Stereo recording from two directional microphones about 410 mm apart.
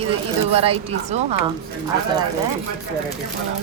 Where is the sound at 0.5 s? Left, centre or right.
Centre.